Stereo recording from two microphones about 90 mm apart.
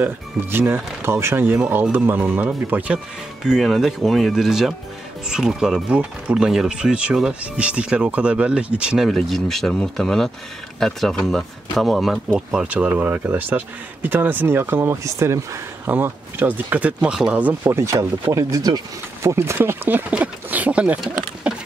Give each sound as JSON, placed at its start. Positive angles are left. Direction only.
{"t": 0.0, "sound": "speech", "side_deg": -25}
{"t": 3.4, "sound": "speech", "side_deg": -5}
{"t": 9.0, "sound": "speech", "side_deg": 0}
{"t": 15.9, "sound": "speech", "side_deg": -20}
{"t": 17.7, "sound": "speech", "side_deg": -30}
{"t": 18.3, "sound": "speech", "side_deg": -45}
{"t": 19.2, "sound": "speech", "side_deg": -30}